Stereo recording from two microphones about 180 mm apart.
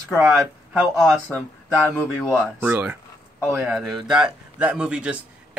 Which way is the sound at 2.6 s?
10° right (ahead or behind).